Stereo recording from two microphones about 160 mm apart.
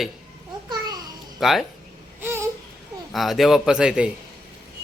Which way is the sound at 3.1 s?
Centre (ahead or behind).